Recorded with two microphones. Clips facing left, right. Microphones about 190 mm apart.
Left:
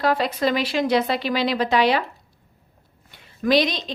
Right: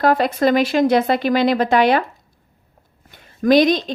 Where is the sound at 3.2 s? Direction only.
50° right (ahead or behind).